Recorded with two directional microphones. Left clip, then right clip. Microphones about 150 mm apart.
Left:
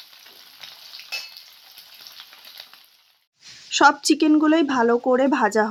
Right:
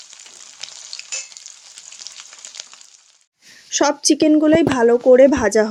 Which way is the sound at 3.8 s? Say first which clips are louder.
Even; 40° left (ahead or behind).